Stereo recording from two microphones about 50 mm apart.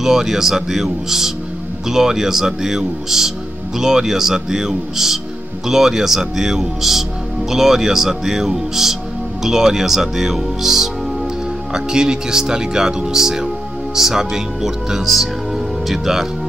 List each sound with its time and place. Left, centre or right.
0.0 s speech: centre